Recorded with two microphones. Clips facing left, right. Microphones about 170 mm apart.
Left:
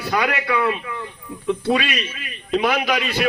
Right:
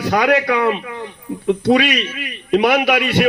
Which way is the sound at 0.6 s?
65° right (ahead or behind).